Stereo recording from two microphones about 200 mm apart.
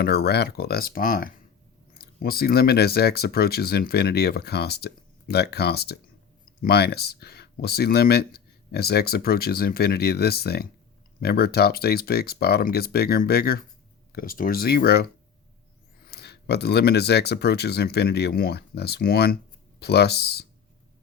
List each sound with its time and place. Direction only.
0.0 s speech: 55° left (ahead or behind)
16.0 s speech: 55° left (ahead or behind)